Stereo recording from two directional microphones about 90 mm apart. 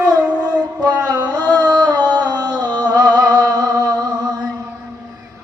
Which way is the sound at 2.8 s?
45° right (ahead or behind).